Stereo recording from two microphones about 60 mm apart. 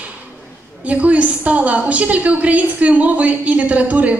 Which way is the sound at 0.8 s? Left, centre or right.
Right.